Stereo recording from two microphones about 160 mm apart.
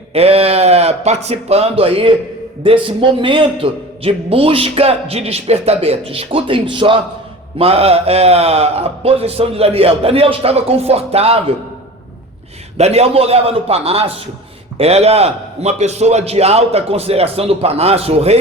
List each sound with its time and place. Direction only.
0.1 s a man's voice: 40° right (ahead or behind)
12.7 s a man's voice: 40° right (ahead or behind)